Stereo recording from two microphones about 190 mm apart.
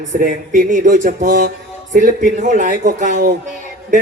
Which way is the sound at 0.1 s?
40° right (ahead or behind).